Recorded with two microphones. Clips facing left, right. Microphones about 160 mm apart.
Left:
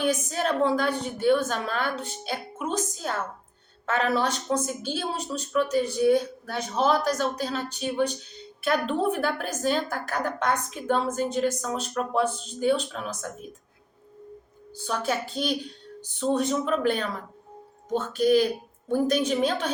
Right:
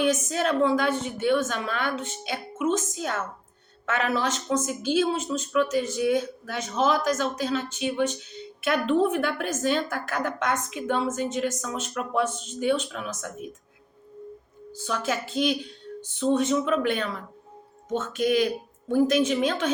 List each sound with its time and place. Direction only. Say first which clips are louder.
0.3 s speech: right 1 dB; 40° left (ahead or behind)
14.8 s speech: left 1 dB; 35° left (ahead or behind)